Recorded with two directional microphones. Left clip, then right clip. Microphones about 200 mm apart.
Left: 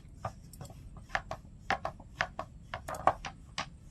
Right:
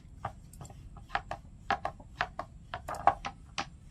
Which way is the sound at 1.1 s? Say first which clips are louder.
Right 1 dB; 20° left (ahead or behind).